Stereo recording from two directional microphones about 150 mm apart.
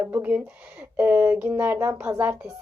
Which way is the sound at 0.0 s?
10° right (ahead or behind).